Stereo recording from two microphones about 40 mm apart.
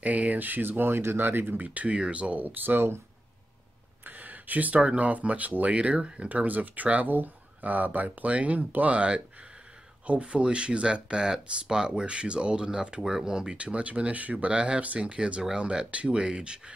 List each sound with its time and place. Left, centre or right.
0.0 s speech: right
1.6 s speech: right
2.0 s speech: right
4.0 s a sound: right
4.8 s speech: right
6.2 s speech: right; by 13.6 s centre
13.6 s speech: right
14.5 s speech: right